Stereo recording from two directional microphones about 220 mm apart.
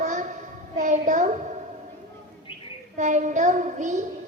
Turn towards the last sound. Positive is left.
turn(degrees=-35)  # may be behind; listen again after turning